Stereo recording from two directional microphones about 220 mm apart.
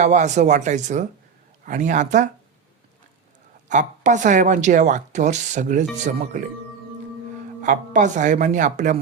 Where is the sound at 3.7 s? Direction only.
35° right (ahead or behind).